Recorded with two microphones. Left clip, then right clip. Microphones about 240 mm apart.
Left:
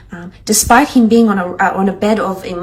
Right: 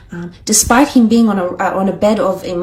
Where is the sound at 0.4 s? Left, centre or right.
Right.